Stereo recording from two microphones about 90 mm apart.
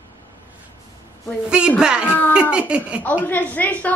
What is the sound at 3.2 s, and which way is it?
Speech, 20° left (ahead or behind).